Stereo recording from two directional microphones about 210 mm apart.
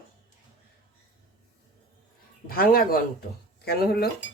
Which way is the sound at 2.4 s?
45° left (ahead or behind).